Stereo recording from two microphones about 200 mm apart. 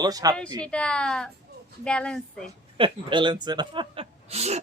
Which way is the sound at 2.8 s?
25° right (ahead or behind).